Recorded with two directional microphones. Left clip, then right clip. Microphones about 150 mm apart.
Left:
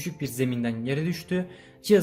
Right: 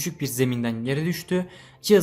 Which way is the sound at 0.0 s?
25° right (ahead or behind).